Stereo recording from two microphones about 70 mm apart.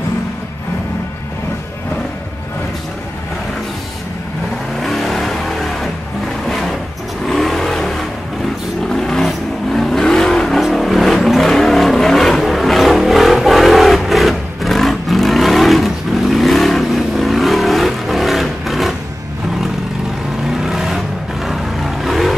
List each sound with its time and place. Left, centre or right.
4.7 s vehicle: centre
20.4 s vehicle: centre